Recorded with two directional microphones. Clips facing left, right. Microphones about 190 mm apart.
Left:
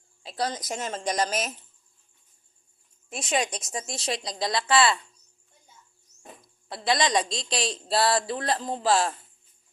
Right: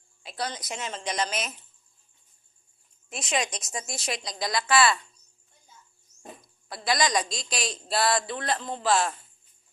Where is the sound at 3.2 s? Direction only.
30° left (ahead or behind).